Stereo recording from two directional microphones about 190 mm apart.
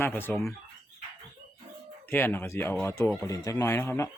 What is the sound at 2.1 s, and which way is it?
Speech, 10° left (ahead or behind).